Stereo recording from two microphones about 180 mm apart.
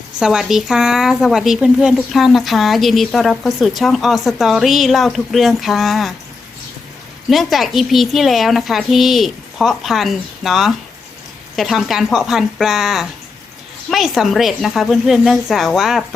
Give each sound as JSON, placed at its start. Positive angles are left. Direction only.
{"t": 0.2, "sound": "speech", "side_deg": -5}
{"t": 7.3, "sound": "speech", "side_deg": 0}